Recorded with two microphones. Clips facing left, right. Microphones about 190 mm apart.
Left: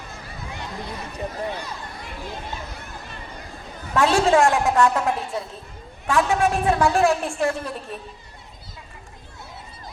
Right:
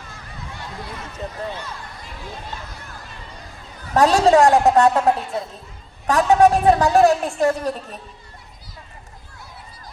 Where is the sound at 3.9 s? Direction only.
40° right (ahead or behind).